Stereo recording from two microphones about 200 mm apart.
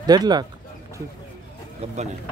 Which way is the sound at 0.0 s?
20° right (ahead or behind).